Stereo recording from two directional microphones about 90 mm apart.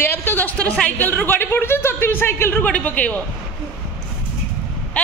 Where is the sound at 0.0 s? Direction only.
25° left (ahead or behind).